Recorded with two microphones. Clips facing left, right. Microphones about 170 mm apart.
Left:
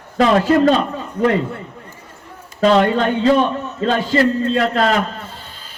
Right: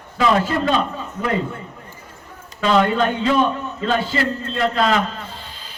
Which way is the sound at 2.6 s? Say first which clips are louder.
Left 3 dB; 40° left (ahead or behind).